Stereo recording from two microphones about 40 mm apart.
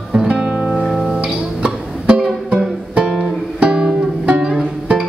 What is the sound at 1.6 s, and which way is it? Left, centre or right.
Music, right.